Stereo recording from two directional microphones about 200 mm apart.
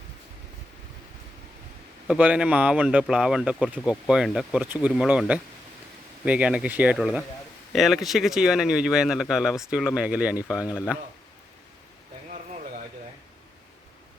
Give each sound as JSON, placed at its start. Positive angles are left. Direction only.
{"t": 2.0, "sound": "speech", "side_deg": -5}
{"t": 10.5, "sound": "a man's voice", "side_deg": 15}